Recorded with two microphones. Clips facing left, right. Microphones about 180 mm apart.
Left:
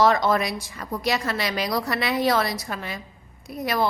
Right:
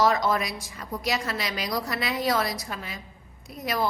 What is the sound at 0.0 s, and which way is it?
A woman's voice, 65° left (ahead or behind).